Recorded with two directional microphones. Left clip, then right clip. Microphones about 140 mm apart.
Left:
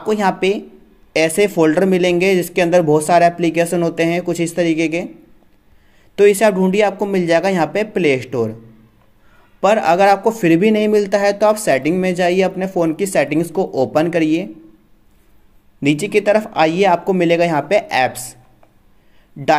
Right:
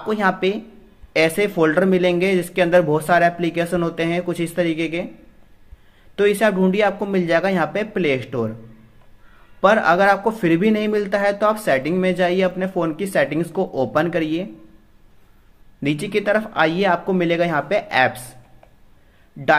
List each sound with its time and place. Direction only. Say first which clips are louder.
0.0 s a man's voice: left 3 dB; 40° left (ahead or behind)
6.1 s a man's voice: left 5 dB; 40° left (ahead or behind)
9.6 s a man's voice: left 2 dB; 40° left (ahead or behind)
15.8 s a man's voice: left 6 dB; 40° left (ahead or behind)